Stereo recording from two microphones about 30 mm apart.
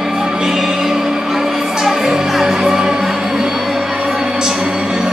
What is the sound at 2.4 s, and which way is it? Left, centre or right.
Music, centre.